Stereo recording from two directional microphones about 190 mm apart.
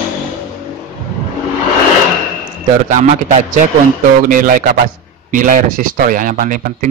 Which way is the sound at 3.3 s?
40° right (ahead or behind).